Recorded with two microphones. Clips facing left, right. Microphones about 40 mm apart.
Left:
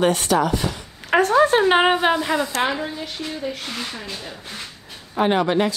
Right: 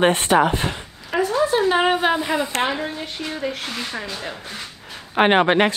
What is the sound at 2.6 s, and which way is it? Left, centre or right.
Speech, centre.